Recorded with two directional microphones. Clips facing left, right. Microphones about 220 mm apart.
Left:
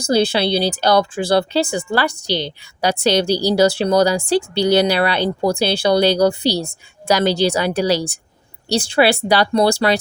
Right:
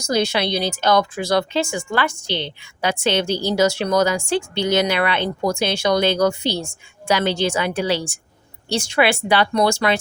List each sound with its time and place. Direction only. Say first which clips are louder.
0.0 s speech: left 4 dB; 30° left (ahead or behind)